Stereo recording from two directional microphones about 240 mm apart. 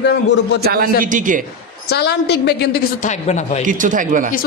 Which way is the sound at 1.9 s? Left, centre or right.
Left.